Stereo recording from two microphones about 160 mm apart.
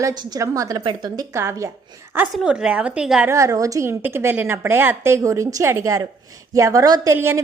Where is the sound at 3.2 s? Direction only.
20° right (ahead or behind).